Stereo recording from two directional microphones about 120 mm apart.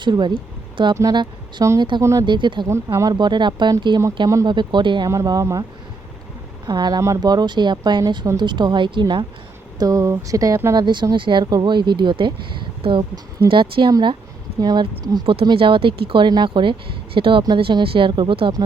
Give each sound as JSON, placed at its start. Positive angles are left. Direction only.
{"t": 0.0, "sound": "speech", "side_deg": -40}
{"t": 2.0, "sound": "speech", "side_deg": -25}
{"t": 2.2, "sound": "speech", "side_deg": -40}
{"t": 2.6, "sound": "speech", "side_deg": -25}
{"t": 4.4, "sound": "speech", "side_deg": -40}
{"t": 5.0, "sound": "speech", "side_deg": -30}
{"t": 6.7, "sound": "speech", "side_deg": -35}
{"t": 9.7, "sound": "speech", "side_deg": -30}
{"t": 10.8, "sound": "speech", "side_deg": -40}